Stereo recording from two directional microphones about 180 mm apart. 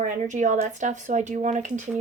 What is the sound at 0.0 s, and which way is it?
Speech, 45° right (ahead or behind).